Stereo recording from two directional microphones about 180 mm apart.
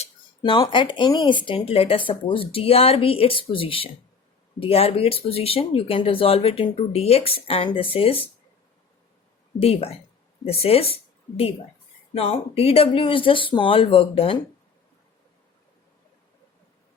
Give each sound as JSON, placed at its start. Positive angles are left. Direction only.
{"t": 0.0, "sound": "speech", "side_deg": 25}
{"t": 9.6, "sound": "speech", "side_deg": 30}
{"t": 12.1, "sound": "speech", "side_deg": 30}